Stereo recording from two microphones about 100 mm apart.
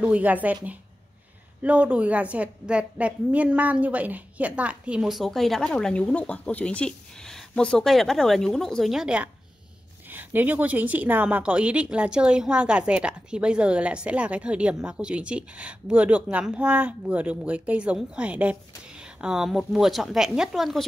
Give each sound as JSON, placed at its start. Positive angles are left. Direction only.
{"t": 0.0, "sound": "a woman's voice", "side_deg": -15}
{"t": 1.6, "sound": "a woman's voice", "side_deg": -15}